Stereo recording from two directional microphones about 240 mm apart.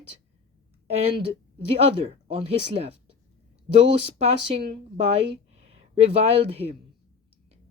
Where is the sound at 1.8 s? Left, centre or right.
Right.